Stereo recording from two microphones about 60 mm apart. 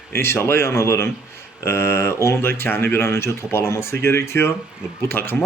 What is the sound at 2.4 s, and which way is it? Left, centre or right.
A man's voice, left.